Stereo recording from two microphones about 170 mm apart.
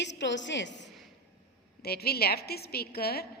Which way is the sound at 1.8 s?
65° left (ahead or behind).